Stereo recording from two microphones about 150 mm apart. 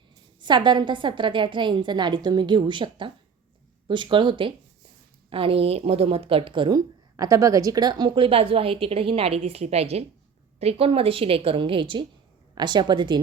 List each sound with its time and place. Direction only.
0.4 s a woman's voice: 30° right (ahead or behind)